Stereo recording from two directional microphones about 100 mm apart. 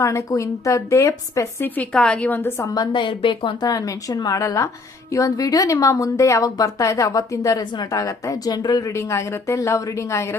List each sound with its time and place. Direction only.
0.0 s a woman's voice: 30° left (ahead or behind)
1.7 s a woman's voice: 10° left (ahead or behind)
2.6 s a woman's voice: 40° left (ahead or behind); by 3.5 s 60° left (ahead or behind)
3.6 s a woman's voice: 35° left (ahead or behind)